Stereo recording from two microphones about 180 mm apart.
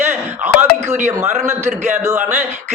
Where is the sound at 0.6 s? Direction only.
40° right (ahead or behind).